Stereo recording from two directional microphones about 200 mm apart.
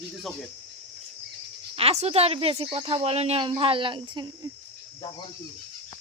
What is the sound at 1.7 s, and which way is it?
Speech, 30° right (ahead or behind).